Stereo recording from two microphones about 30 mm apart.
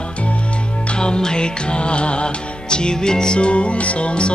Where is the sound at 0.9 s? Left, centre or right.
Left.